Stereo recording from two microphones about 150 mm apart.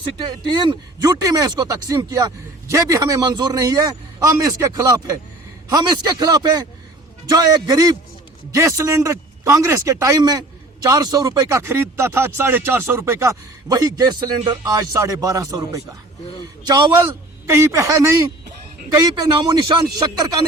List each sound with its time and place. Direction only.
0.3 s speech: 30° right (ahead or behind)